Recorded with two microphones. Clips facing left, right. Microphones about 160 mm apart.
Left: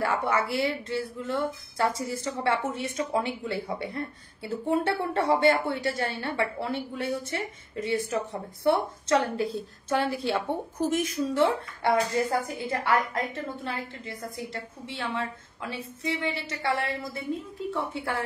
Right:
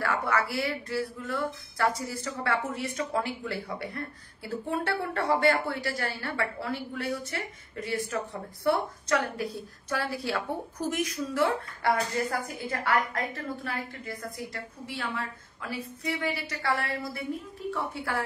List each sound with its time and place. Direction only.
0.0 s speech: 20° left (ahead or behind)